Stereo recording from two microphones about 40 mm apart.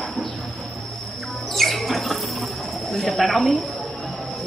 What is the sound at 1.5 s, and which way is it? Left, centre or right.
Rodents, centre.